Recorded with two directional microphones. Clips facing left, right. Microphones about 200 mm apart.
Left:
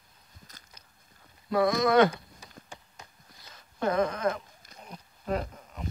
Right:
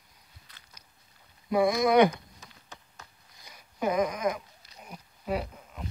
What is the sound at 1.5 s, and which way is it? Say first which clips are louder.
Speech: right 1 dB; 20° right (ahead or behind).